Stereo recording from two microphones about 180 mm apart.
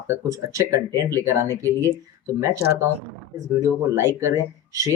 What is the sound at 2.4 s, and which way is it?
Speech, 15° right (ahead or behind).